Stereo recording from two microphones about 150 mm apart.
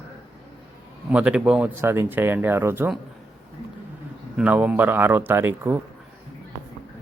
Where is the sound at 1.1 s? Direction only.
5° right (ahead or behind).